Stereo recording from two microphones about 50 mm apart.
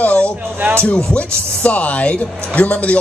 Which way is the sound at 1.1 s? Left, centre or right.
Left.